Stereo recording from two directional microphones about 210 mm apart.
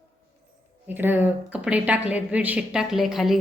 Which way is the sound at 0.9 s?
10° right (ahead or behind).